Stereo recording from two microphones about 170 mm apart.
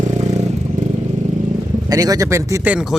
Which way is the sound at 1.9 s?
20° right (ahead or behind).